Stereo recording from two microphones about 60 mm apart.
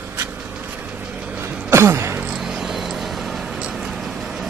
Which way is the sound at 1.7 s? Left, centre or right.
Right.